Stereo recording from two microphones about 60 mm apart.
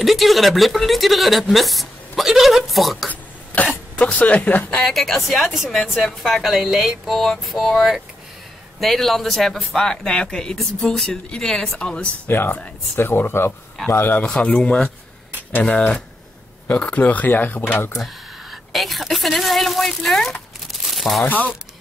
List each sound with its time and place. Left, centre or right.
0.0 s a woman's voice: centre
4.0 s speech: left
4.8 s a woman's voice: centre
12.3 s speech: left
14.1 s speech: centre
18.0 s a woman's voice: centre
20.7 s crumpling: centre